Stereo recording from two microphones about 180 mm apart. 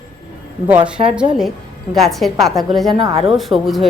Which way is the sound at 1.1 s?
Centre (ahead or behind).